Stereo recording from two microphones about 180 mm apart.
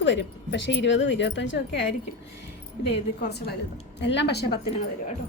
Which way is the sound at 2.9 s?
65° left (ahead or behind).